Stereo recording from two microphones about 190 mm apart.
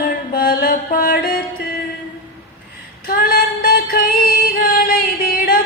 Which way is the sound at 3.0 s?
50° left (ahead or behind).